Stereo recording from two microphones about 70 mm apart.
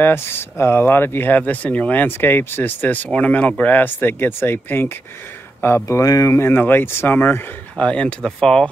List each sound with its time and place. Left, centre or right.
0.0 s speech: left
6.0 s speech: left
6.3 s speech: left
7.8 s speech: centre